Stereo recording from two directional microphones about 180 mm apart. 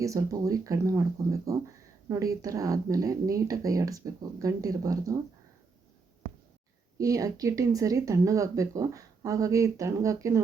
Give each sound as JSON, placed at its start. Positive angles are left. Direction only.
{"t": 0.0, "sound": "speech", "side_deg": -20}
{"t": 7.0, "sound": "speech", "side_deg": -20}